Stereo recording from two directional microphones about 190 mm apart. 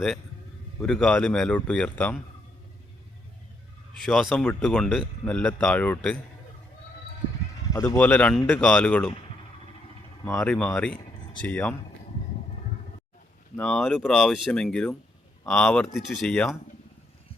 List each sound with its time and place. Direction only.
0.9 s speech: 5° left (ahead or behind)
3.9 s speech: centre (ahead or behind)
7.7 s speech: 15° left (ahead or behind)
10.2 s speech: 15° left (ahead or behind)
10.5 s speech: 5° left (ahead or behind)
13.6 s speech: centre (ahead or behind)